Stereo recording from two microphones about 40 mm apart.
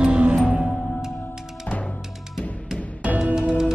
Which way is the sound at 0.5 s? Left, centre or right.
Centre.